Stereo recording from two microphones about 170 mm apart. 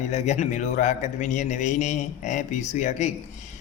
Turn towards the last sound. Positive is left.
turn(degrees=45)  # may be behind; listen again after turning